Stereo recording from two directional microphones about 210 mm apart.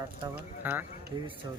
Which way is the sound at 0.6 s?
10° right (ahead or behind).